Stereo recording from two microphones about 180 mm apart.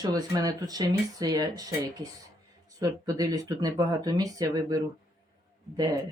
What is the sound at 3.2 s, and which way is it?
Speech, 20° right (ahead or behind).